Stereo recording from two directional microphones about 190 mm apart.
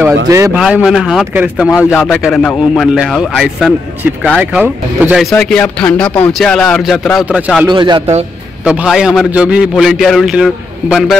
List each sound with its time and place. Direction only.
0.3 s a man's voice: 15° right (ahead or behind)
0.6 s speech: 5° right (ahead or behind)
7.6 s a man's voice: 25° right (ahead or behind)
8.6 s speech: 5° right (ahead or behind)